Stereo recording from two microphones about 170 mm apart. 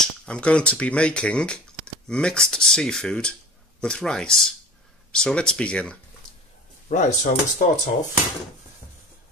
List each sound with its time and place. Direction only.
0.2 s speech: 5° left (ahead or behind)
6.9 s speech: 45° left (ahead or behind)